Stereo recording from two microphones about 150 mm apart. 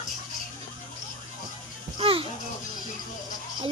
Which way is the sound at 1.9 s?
40° right (ahead or behind).